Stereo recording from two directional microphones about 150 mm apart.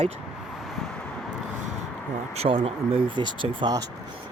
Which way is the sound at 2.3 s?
40° right (ahead or behind).